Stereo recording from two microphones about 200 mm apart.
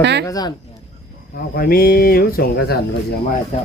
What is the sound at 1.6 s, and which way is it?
Speech, 45° left (ahead or behind).